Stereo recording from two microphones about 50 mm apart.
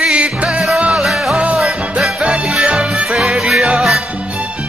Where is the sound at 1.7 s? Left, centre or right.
Right.